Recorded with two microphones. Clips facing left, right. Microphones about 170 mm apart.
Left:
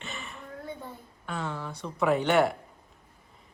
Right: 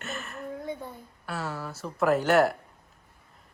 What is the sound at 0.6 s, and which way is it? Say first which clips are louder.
A woman's voice: right 4 dB; 10° right (ahead or behind).